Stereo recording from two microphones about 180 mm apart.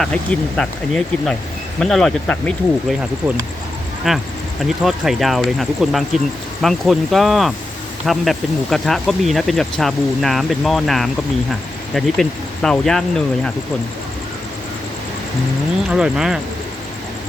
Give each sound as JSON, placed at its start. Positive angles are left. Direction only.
{"t": 0.0, "sound": "speech", "side_deg": 5}
{"t": 3.2, "sound": "speech", "side_deg": -5}
{"t": 15.9, "sound": "speech", "side_deg": -5}